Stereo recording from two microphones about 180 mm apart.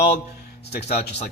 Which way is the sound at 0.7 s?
65° left (ahead or behind).